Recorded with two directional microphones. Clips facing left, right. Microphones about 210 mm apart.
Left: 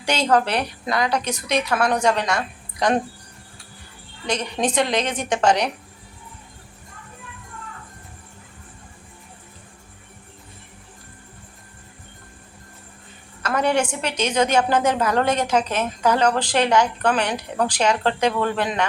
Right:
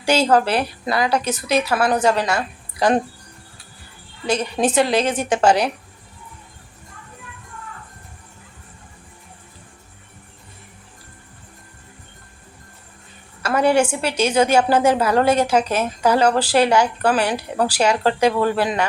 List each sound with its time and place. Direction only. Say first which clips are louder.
0.0 s a woman's voice: right 3 dB; 5° right (ahead or behind)
4.3 s a woman's voice: right 4 dB; 5° right (ahead or behind)
13.4 s a woman's voice: right 4 dB; 10° right (ahead or behind)